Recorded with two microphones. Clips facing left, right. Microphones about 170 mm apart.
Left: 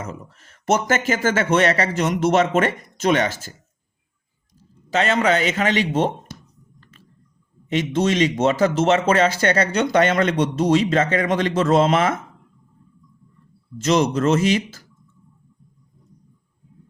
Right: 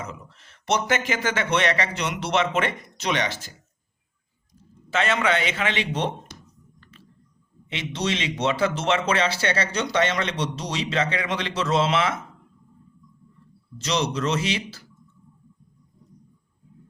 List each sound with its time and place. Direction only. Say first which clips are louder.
0.0 s speech: left 4 dB; 45° left (ahead or behind)
4.9 s speech: left 4 dB; 35° left (ahead or behind)
7.7 s speech: left 8 dB; 45° left (ahead or behind)
13.7 s speech: left 7 dB; 50° left (ahead or behind)